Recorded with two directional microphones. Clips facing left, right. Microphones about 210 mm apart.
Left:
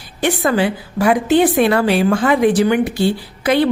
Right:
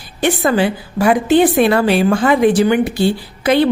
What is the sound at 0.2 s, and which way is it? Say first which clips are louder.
A woman's voice: right 2 dB; 30° right (ahead or behind).